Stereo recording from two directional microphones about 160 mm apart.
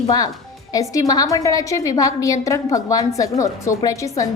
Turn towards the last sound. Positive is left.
turn(degrees=20)  # may be behind; listen again after turning